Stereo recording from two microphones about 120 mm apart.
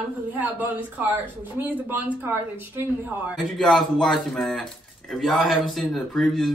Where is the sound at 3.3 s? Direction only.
Centre (ahead or behind).